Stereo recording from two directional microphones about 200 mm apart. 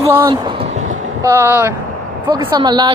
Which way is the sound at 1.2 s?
10° right (ahead or behind).